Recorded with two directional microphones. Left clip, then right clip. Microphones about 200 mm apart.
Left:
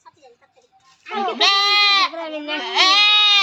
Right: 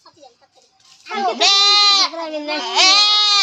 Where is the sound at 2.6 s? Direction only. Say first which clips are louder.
Right 1 dB; 10° left (ahead or behind).